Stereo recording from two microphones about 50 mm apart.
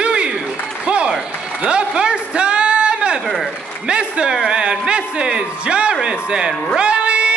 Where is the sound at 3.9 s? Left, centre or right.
Centre.